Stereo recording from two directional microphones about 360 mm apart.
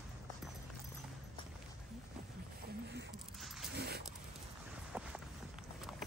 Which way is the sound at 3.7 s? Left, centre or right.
Right.